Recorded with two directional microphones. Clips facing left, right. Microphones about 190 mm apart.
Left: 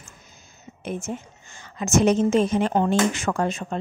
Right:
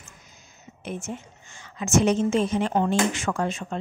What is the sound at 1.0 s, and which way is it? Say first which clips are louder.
A woman's voice: left 3 dB; 40° left (ahead or behind).